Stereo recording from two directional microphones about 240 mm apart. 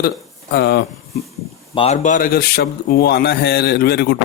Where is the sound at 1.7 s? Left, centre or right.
Left.